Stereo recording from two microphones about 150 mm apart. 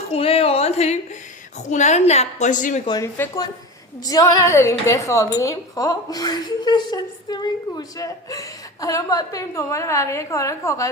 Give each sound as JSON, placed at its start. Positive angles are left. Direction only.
{"t": 0.1, "sound": "a woman's voice", "side_deg": 40}
{"t": 2.8, "sound": "a woman's voice", "side_deg": 25}